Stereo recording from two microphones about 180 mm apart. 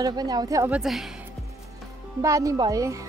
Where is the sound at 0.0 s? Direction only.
20° right (ahead or behind).